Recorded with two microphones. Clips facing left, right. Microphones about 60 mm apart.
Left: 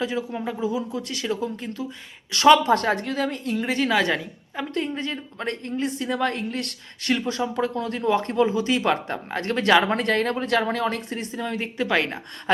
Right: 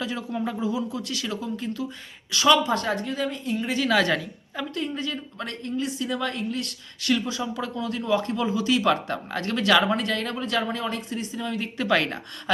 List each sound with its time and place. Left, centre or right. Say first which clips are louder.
0.0 s speech: left 2 dB; centre
2.3 s a woman's voice: left 5 dB; left
3.8 s a woman's voice: right 3 dB; centre
4.7 s speech: left 3 dB; left
7.0 s speech: left 1 dB; left
9.9 s speech: left 4 dB; left
11.8 s a woman's voice: even; centre